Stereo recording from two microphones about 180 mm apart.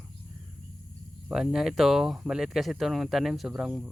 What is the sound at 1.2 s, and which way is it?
Speech, centre (ahead or behind).